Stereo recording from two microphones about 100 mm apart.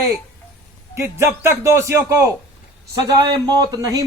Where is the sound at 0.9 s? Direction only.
25° right (ahead or behind).